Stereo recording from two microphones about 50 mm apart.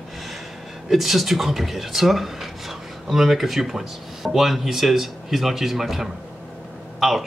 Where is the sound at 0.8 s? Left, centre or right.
Centre.